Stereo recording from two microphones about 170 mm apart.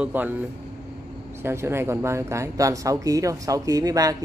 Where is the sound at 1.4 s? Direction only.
15° right (ahead or behind).